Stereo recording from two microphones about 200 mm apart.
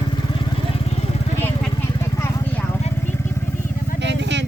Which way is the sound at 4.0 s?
60° right (ahead or behind).